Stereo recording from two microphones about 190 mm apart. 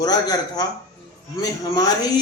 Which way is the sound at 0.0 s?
20° left (ahead or behind).